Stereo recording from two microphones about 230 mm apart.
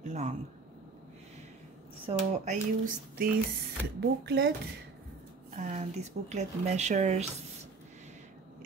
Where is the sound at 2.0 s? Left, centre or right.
Right.